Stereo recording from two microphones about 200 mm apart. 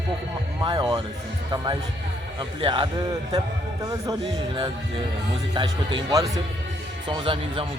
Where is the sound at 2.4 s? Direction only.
25° right (ahead or behind).